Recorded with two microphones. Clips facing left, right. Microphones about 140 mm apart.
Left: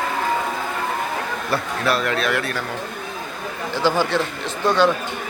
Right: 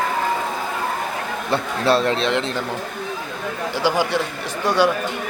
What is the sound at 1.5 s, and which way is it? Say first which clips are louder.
Speech: right 4 dB; 30° right (ahead or behind).